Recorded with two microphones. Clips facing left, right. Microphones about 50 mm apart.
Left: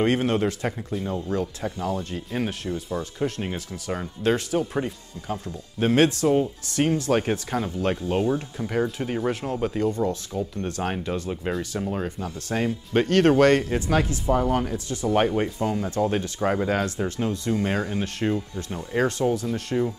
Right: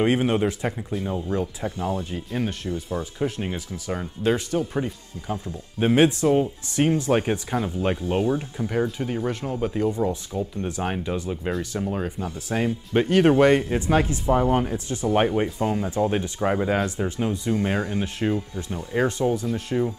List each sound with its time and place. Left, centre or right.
0.0 s speech: centre
2.3 s speech: centre
2.9 s speech: centre
5.8 s speech: centre